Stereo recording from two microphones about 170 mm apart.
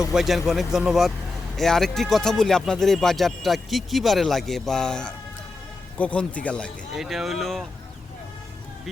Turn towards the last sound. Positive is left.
turn(degrees=0)  # may be behind; listen again after turning